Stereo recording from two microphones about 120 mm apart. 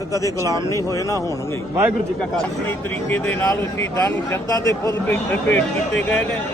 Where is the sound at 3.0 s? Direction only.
15° left (ahead or behind).